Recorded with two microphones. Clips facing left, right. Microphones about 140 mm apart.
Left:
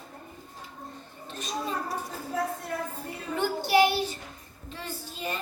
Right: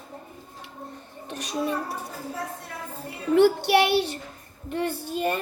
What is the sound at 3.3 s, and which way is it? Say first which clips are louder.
Speech: right 6 dB; 70° right (ahead or behind).